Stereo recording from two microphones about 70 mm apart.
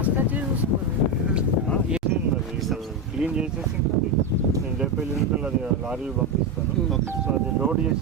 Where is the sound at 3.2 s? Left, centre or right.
Centre.